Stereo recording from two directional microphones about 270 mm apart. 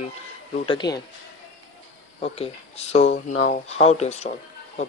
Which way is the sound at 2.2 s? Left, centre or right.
Left.